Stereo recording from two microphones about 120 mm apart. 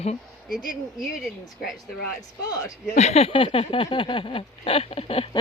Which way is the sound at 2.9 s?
65° left (ahead or behind).